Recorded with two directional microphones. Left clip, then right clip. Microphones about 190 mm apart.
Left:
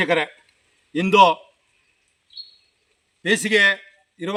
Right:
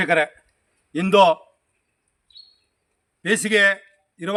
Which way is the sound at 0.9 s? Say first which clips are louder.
Left 1 dB; 20° right (ahead or behind).